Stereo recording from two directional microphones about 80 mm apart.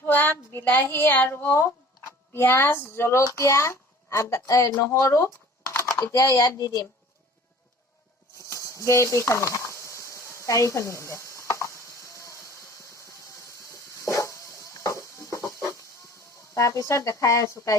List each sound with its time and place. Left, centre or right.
0.0 s a woman's voice: left
6.1 s speech: left
8.4 s a sound: left
15.0 s chicken: left
16.6 s a woman's voice: left